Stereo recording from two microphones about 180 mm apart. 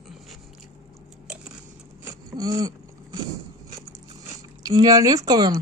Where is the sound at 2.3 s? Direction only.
20° right (ahead or behind).